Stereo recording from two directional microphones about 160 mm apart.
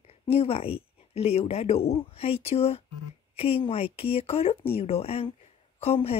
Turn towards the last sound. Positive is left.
turn(degrees=40)  # may be behind; listen again after turning